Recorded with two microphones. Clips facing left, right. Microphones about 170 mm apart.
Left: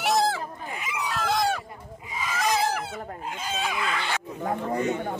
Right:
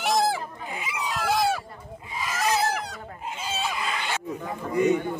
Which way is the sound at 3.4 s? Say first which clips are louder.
Even; 5° right (ahead or behind).